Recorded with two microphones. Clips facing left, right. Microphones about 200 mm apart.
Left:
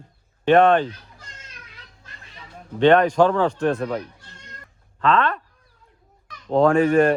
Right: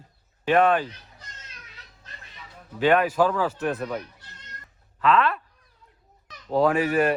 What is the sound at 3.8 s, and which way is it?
Speech, 30° left (ahead or behind).